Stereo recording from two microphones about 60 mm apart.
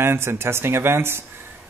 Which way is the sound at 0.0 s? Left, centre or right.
Right.